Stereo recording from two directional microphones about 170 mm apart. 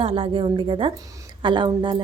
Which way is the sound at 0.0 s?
30° right (ahead or behind).